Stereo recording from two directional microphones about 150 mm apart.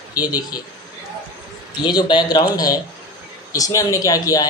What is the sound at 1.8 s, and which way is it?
Speech, 30° left (ahead or behind).